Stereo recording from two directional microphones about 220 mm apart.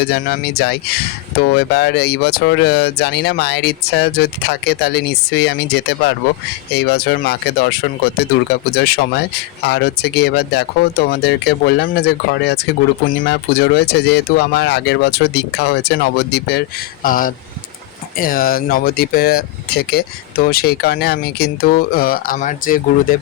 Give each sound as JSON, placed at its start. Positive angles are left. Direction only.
{"t": 0.0, "sound": "speech", "side_deg": 45}